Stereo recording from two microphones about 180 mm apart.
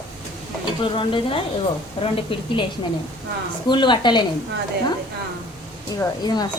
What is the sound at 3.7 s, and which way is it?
Speech, 25° left (ahead or behind).